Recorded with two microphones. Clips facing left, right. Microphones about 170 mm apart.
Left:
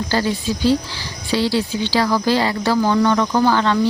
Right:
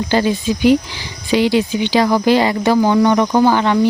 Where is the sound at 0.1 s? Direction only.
20° right (ahead or behind).